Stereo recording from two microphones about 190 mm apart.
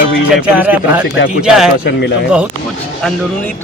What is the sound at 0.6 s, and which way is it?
Speech, 10° right (ahead or behind).